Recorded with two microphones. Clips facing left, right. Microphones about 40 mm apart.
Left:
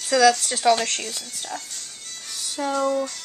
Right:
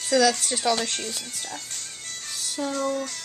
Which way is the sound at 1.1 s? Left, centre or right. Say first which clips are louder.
Left 1 dB; centre.